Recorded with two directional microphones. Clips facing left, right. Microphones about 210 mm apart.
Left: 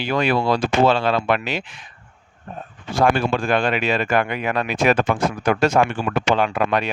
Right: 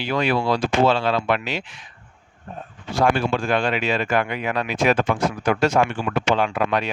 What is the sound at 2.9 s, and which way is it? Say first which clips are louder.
Speech: left 1 dB; 55° left (ahead or behind).